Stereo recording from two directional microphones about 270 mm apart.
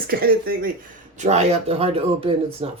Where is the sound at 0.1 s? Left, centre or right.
Right.